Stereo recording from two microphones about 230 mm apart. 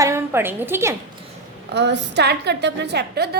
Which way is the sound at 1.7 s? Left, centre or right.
Right.